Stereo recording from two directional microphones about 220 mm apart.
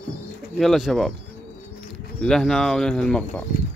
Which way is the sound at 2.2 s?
Centre (ahead or behind).